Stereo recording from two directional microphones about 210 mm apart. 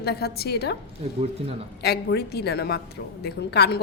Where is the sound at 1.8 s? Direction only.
50° left (ahead or behind).